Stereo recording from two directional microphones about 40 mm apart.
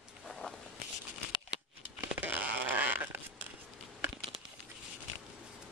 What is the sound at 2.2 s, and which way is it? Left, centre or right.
Fart, right.